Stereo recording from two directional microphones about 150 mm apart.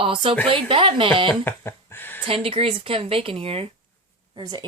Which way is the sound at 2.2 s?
40° right (ahead or behind).